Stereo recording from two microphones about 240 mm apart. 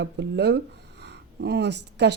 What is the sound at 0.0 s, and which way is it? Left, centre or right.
Speech, right.